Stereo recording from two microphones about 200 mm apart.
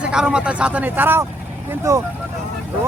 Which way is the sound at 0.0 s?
5° right (ahead or behind).